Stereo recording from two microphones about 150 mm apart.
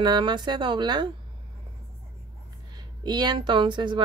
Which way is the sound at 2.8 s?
30° right (ahead or behind).